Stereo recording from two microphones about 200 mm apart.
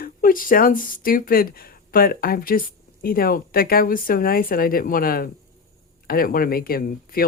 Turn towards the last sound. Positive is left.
turn(degrees=45)  # may be behind; listen again after turning